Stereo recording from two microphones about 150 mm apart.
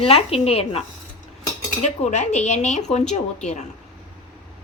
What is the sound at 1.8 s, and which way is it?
Speech, 50° left (ahead or behind).